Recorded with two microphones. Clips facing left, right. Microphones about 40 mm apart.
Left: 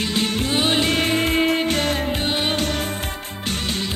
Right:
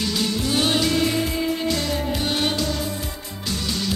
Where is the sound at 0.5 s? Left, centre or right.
Left.